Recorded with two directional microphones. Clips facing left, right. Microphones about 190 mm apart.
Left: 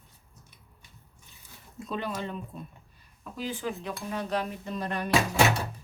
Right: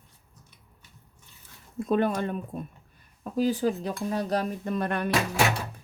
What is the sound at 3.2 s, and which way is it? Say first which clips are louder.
Speech: right 9 dB; 40° right (ahead or behind).